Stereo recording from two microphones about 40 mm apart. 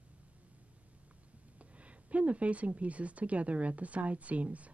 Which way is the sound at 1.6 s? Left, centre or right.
Right.